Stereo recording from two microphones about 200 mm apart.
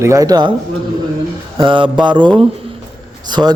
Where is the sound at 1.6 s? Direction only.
25° right (ahead or behind).